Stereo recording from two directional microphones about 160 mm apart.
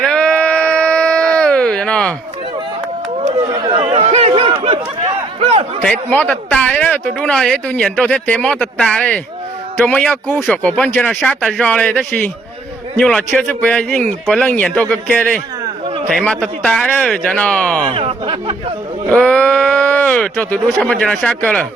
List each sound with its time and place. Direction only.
0.0 s sheep: 5° left (ahead or behind)
3.2 s chatter: 30° right (ahead or behind)
5.4 s a sound: 40° right (ahead or behind)
5.8 s speech: 5° left (ahead or behind)
17.9 s speech: 30° right (ahead or behind)
19.1 s speech: 5° left (ahead or behind)